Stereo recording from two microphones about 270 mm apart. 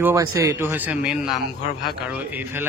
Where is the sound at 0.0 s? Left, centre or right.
Centre.